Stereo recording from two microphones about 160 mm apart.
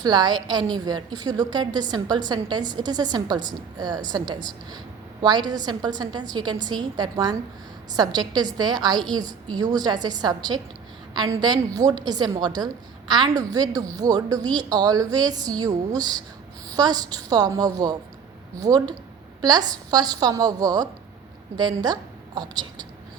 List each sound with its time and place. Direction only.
0.0 s a woman's voice: 25° right (ahead or behind)